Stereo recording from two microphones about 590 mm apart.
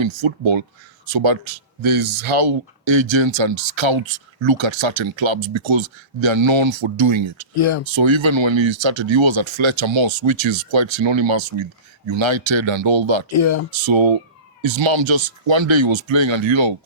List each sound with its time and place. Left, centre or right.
0.0 s speech: right
7.5 s speech: left
7.9 s speech: right
13.3 s speech: left
13.7 s speech: right